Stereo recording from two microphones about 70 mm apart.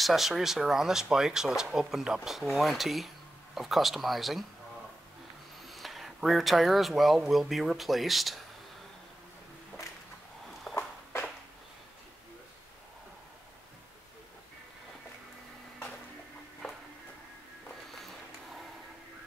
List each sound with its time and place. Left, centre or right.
0.0 s speech: centre
5.7 s speech: centre
10.7 s a sound: centre